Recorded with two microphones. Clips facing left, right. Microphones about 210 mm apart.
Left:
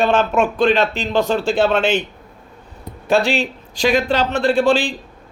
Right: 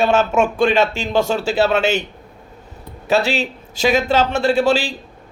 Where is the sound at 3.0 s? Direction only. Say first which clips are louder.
Left 1 dB; 5° right (ahead or behind).